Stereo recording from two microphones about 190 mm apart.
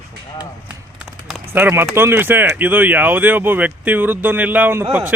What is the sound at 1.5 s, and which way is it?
Speech, 10° right (ahead or behind).